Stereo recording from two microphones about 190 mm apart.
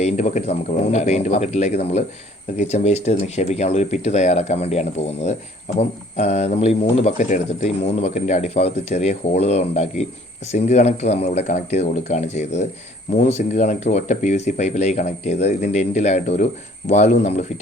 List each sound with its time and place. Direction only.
0.0 s speech: 35° left (ahead or behind)